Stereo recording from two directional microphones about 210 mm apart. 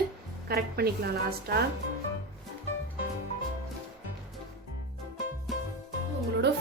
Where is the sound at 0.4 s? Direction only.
45° right (ahead or behind).